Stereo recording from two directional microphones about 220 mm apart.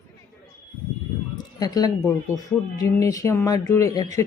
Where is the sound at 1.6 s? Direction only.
15° left (ahead or behind).